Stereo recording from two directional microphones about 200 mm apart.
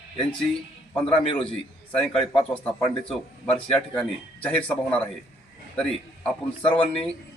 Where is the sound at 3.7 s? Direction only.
5° left (ahead or behind).